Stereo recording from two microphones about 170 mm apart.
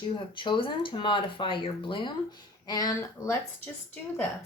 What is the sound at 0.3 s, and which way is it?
Speech, 30° left (ahead or behind).